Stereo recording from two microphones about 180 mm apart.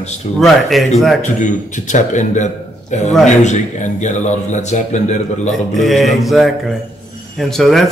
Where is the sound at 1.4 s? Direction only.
45° left (ahead or behind).